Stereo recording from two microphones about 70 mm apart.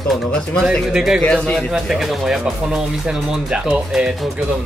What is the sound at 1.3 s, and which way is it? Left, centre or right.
Speech, centre.